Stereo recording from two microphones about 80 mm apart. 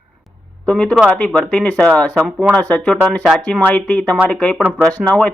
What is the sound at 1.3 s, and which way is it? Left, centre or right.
Speech, centre.